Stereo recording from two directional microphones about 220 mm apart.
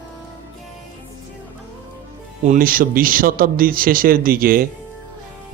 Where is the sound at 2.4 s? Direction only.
35° right (ahead or behind).